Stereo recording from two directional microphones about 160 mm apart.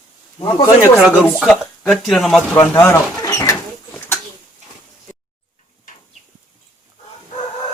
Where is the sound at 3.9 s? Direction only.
15° left (ahead or behind).